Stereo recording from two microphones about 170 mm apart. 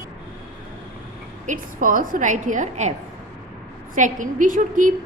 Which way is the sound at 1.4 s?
50° right (ahead or behind).